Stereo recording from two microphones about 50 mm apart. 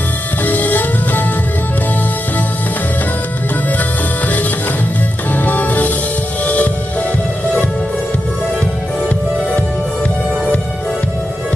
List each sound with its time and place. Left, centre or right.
0.4 s music: left
5.3 s music: left